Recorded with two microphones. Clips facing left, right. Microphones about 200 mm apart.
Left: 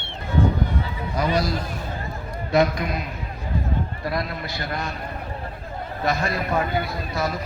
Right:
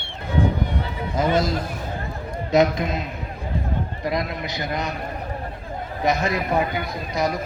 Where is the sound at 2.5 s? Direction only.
20° right (ahead or behind).